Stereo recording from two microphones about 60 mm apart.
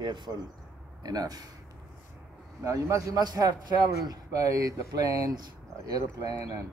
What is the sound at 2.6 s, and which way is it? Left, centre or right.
Speech, right.